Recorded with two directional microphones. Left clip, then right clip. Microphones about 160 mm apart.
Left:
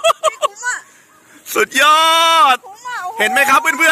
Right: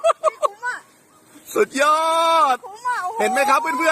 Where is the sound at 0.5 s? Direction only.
45° right (ahead or behind).